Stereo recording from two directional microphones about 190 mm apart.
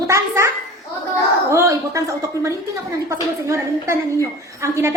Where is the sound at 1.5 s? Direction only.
15° right (ahead or behind).